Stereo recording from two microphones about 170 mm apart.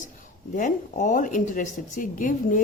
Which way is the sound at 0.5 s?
50° left (ahead or behind).